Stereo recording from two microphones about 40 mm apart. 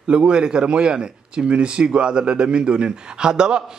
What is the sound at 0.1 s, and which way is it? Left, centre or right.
Speech, right.